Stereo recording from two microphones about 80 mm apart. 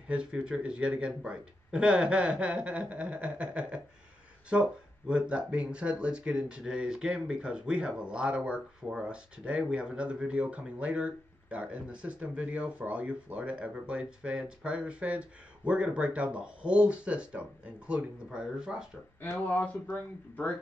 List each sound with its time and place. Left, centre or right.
0.1 s speech: centre
19.2 s speech: centre